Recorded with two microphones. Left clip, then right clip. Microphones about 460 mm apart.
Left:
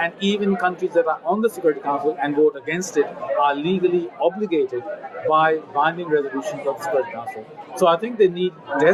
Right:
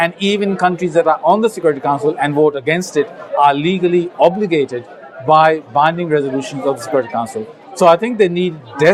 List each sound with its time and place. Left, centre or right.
0.0 s speech: right